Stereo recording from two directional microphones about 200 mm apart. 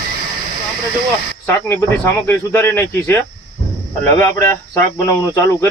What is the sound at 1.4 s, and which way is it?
Speech, 10° left (ahead or behind).